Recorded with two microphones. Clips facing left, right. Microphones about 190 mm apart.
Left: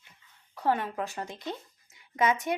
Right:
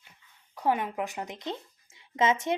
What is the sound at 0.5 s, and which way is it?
Speech, 15° right (ahead or behind).